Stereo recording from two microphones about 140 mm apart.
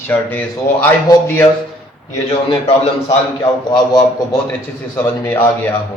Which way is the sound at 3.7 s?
30° left (ahead or behind).